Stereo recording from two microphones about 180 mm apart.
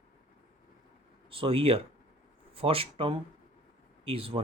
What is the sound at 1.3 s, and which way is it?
Speech, 30° right (ahead or behind).